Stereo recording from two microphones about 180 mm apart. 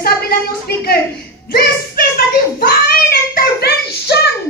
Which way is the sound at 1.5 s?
55° left (ahead or behind).